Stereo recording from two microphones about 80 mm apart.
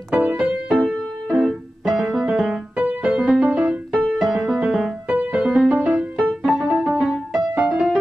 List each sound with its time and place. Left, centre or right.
0.1 s music: centre
1.3 s music: centre
4.3 s music: centre